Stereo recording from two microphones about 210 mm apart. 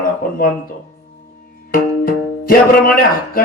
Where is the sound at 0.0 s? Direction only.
45° left (ahead or behind).